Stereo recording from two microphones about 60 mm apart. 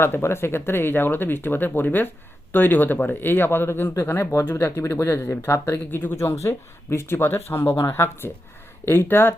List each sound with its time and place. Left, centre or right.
0.0 s speech: left